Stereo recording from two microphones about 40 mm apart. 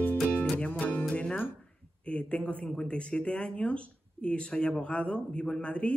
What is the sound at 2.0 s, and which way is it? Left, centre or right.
Speech, left.